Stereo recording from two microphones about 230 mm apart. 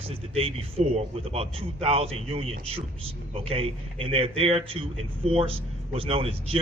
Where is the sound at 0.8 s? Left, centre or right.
Right.